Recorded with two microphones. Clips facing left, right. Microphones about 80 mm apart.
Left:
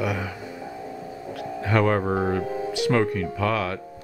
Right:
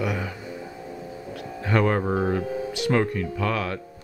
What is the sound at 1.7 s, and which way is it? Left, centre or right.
Speech, centre.